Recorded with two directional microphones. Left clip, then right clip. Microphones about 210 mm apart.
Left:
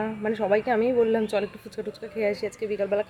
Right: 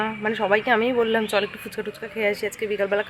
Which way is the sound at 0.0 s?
5° left (ahead or behind).